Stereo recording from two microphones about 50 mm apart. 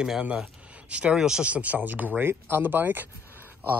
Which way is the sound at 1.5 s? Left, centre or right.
Right.